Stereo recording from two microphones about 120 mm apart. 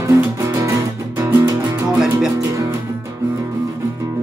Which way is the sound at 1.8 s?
5° right (ahead or behind).